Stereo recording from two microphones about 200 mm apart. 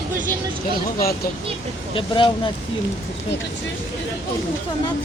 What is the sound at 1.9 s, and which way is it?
Speech, 25° left (ahead or behind).